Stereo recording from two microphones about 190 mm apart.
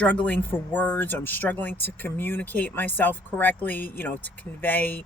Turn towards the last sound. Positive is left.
turn(degrees=10)  # may be behind; listen again after turning